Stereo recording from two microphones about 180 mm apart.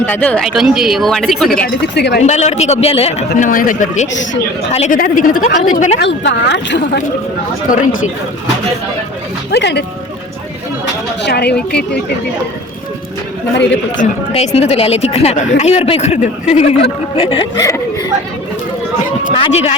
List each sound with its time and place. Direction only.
0.0 s speech: 10° left (ahead or behind)
0.4 s speech: centre (ahead or behind)
1.6 s speech: 65° left (ahead or behind)
2.2 s a woman's voice: 40° left (ahead or behind)
4.9 s speech: 50° left (ahead or behind)
6.0 s a woman's voice: 75° left (ahead or behind)
9.5 s a woman's voice: 70° left (ahead or behind)
11.2 s speech: 65° left (ahead or behind)
14.0 s a woman's voice: 35° left (ahead or behind)
19.3 s a woman's voice: 35° left (ahead or behind)